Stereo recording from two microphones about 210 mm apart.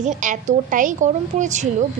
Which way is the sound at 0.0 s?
35° right (ahead or behind).